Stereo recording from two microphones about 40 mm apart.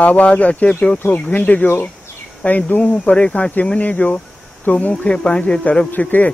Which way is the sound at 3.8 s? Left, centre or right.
Left.